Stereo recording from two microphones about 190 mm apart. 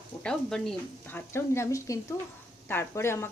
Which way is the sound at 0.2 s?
5° left (ahead or behind).